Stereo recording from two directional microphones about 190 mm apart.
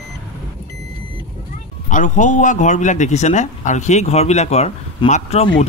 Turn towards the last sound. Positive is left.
turn(degrees=30)  # may be behind; listen again after turning